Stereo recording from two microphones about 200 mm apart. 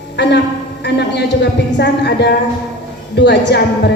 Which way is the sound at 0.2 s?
60° left (ahead or behind).